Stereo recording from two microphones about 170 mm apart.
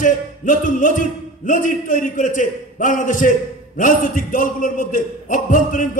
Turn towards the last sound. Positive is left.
turn(degrees=50)  # may be behind; listen again after turning